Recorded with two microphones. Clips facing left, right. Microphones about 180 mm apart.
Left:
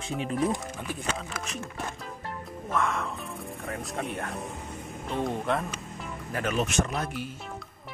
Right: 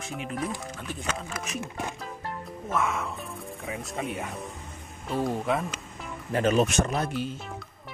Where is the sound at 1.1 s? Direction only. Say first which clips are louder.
Right 2 dB; 5° right (ahead or behind).